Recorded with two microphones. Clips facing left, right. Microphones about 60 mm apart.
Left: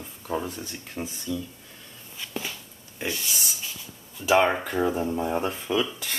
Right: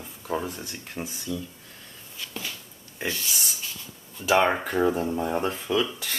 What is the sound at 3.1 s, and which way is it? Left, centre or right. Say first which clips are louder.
Speech: even; centre.